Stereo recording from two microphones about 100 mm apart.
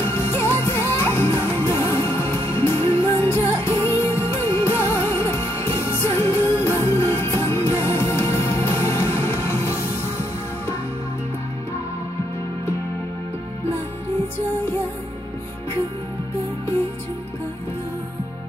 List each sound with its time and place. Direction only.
0.0 s music: 25° left (ahead or behind)